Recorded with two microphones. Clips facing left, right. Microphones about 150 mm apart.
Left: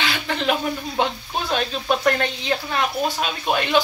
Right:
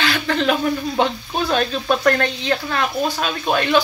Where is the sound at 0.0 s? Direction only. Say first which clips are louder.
Right 4 dB; 15° left (ahead or behind).